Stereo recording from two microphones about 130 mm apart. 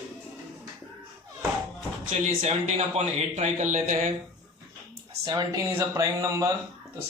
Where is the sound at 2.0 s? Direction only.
65° right (ahead or behind).